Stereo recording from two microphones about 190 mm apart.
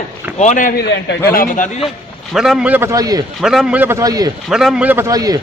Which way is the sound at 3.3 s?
Centre (ahead or behind).